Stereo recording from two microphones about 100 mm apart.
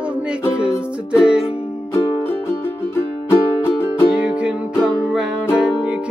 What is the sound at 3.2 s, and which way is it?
Music, 25° left (ahead or behind).